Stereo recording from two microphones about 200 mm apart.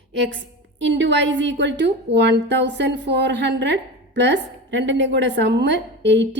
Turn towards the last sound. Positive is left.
turn(degrees=-60)  # may be behind; listen again after turning